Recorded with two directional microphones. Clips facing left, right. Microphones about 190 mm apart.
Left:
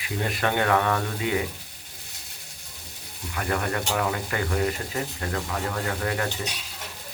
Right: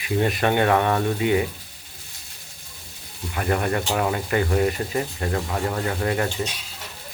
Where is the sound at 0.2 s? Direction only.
20° right (ahead or behind).